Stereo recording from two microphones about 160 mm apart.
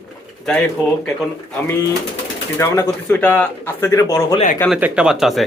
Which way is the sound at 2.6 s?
15° left (ahead or behind).